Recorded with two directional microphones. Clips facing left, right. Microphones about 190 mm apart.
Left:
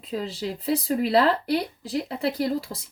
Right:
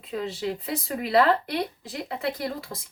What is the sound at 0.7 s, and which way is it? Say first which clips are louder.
Speech: left 7 dB; 35° left (ahead or behind).